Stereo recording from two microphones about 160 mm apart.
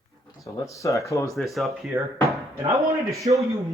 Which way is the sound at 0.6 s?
20° left (ahead or behind).